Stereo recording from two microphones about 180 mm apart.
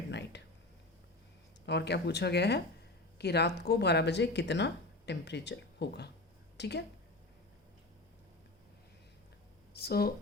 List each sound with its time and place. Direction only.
0.1 s a sound: 75° left (ahead or behind)
1.6 s speech: 70° left (ahead or behind)
9.7 s speech: 60° left (ahead or behind)